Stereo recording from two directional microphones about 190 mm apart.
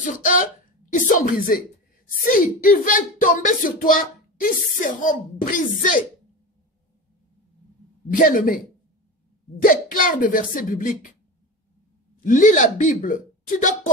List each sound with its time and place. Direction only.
0.0 s speech: 45° left (ahead or behind)
8.2 s speech: 45° left (ahead or behind)
9.6 s speech: 45° left (ahead or behind)
12.2 s speech: 45° left (ahead or behind)